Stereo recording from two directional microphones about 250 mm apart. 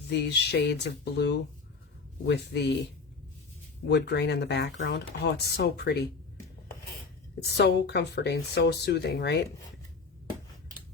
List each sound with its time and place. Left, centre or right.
0.1 s speech: left
3.8 s speech: left
7.5 s speech: left